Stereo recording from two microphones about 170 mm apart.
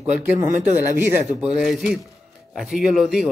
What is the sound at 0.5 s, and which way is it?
Speech, 45° right (ahead or behind).